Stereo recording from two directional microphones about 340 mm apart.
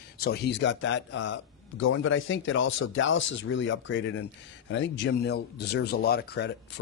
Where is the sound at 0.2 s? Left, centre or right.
Left.